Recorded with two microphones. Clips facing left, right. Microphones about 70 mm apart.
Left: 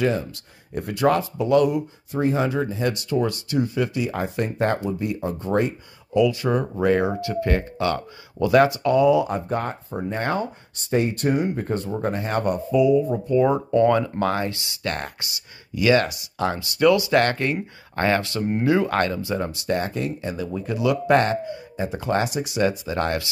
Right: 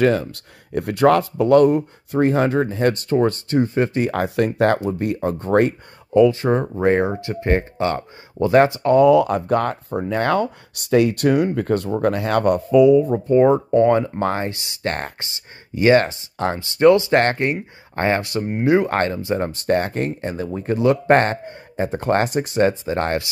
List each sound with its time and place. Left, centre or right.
0.0 s speech: right
4.1 s speech: right
6.1 s speech: right
8.9 s speech: right
10.0 s speech: right
13.1 s speech: right
13.5 s speech: right
19.3 s speech: right